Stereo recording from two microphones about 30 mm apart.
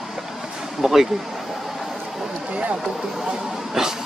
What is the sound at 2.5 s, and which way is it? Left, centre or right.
Speech, right.